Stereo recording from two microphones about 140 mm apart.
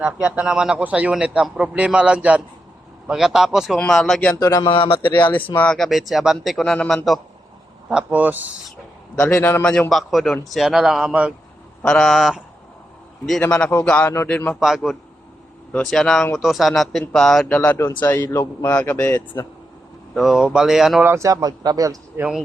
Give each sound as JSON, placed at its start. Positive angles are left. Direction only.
{"t": 0.0, "sound": "a man's voice", "side_deg": -10}
{"t": 4.4, "sound": "speech", "side_deg": 25}
{"t": 5.5, "sound": "a man's voice", "side_deg": 5}
{"t": 9.1, "sound": "a man's voice", "side_deg": 15}
{"t": 11.8, "sound": "speech", "side_deg": 5}
{"t": 13.4, "sound": "a man's voice", "side_deg": 10}
{"t": 14.5, "sound": "a man's voice", "side_deg": 0}
{"t": 20.1, "sound": "speech", "side_deg": 0}
{"t": 21.0, "sound": "speech", "side_deg": -20}
{"t": 22.2, "sound": "speech", "side_deg": -5}